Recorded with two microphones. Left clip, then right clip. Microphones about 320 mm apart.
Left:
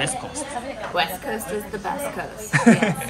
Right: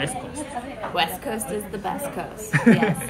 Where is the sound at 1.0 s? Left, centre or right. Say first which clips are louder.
Even; centre.